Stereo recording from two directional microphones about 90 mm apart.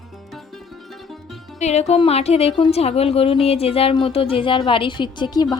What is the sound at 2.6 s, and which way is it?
A woman's voice, 90° left.